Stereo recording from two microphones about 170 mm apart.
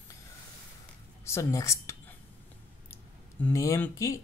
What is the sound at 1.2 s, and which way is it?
Speech, 15° left (ahead or behind).